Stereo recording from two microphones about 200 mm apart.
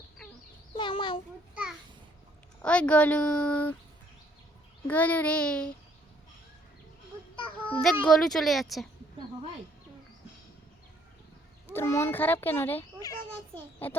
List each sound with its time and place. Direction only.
0.8 s a sound: 25° left (ahead or behind)
2.6 s a child's voice: 5° left (ahead or behind)
4.9 s a child's voice: 5° left (ahead or behind)
7.6 s a child's voice: 5° left (ahead or behind)
11.7 s a child's voice: 15° left (ahead or behind)